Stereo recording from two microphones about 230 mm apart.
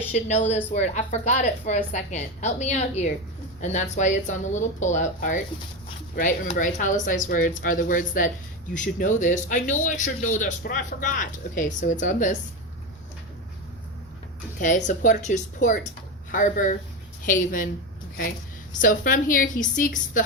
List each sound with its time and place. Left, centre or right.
0.1 s speech: left
14.6 s speech: left
18.7 s speech: left